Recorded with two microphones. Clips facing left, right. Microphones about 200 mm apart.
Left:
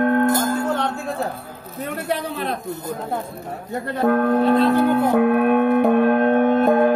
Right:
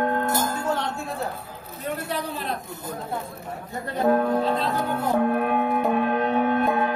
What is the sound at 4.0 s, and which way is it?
Music, 70° left (ahead or behind).